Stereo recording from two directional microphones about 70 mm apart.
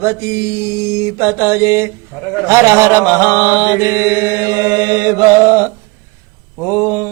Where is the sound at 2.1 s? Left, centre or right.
Centre.